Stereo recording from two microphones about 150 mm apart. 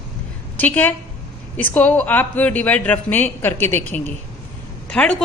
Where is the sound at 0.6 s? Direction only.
10° left (ahead or behind).